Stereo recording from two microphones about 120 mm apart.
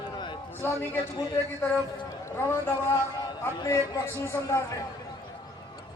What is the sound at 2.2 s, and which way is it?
Speech, 20° left (ahead or behind).